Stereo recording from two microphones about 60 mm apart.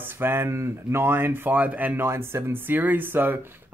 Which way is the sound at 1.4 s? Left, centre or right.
Right.